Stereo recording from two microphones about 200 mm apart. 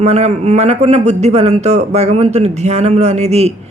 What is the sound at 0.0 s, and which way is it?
Speech, 30° right (ahead or behind).